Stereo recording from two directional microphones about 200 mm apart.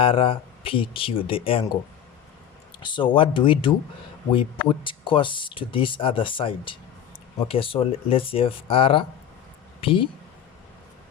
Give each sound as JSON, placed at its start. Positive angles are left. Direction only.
{"t": 0.0, "sound": "speech", "side_deg": 25}
{"t": 2.8, "sound": "speech", "side_deg": 25}